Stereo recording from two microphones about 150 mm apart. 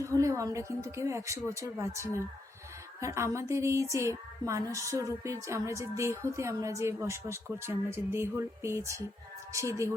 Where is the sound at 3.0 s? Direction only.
20° right (ahead or behind).